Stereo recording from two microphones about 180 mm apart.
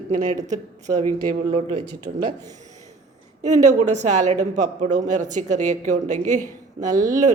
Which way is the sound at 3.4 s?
40° right (ahead or behind).